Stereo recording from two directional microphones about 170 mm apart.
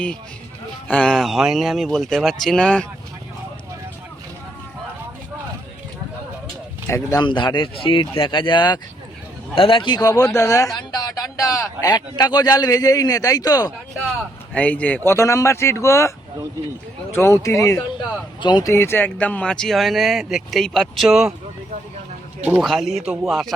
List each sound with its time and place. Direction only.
0.9 s speech: 5° left (ahead or behind)
6.8 s speech: 15° left (ahead or behind)
7.3 s a man's voice: 30° left (ahead or behind)
14.5 s speech: 10° left (ahead or behind)
17.2 s speech: 15° left (ahead or behind); by 21.3 s centre (ahead or behind)
22.6 s speech: centre (ahead or behind)